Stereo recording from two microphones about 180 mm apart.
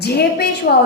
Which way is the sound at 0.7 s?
55° left (ahead or behind).